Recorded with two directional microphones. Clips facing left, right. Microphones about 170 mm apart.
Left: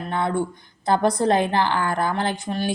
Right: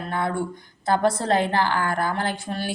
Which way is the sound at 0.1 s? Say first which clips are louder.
Left 3 dB; 25° left (ahead or behind).